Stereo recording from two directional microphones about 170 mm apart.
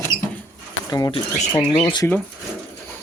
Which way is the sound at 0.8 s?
25° left (ahead or behind).